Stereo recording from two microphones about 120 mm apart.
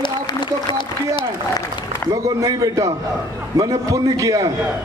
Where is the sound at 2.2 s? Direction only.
25° right (ahead or behind).